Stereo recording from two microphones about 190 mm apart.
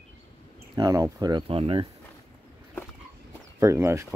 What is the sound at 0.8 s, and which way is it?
Speech, 20° right (ahead or behind).